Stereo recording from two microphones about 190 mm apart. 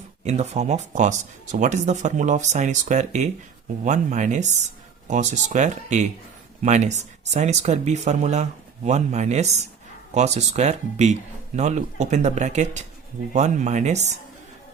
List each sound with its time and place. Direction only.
0.3 s speech: 35° right (ahead or behind)